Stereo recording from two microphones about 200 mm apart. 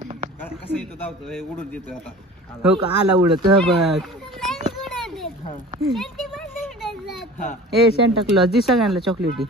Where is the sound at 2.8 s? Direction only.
20° right (ahead or behind).